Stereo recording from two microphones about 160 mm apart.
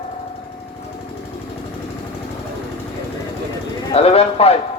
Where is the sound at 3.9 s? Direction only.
40° left (ahead or behind).